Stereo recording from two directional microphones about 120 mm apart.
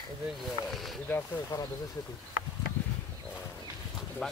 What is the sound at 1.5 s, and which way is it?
Speech, 25° left (ahead or behind).